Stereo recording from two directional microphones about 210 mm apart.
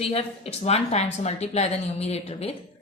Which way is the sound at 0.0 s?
30° left (ahead or behind).